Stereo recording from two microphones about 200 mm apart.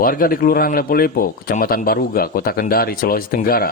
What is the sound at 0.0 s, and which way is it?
Speech, 45° left (ahead or behind).